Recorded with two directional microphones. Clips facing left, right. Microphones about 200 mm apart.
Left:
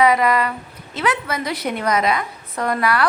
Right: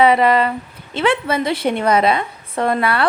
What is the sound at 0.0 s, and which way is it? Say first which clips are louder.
A woman's voice: right 3 dB; 30° right (ahead or behind).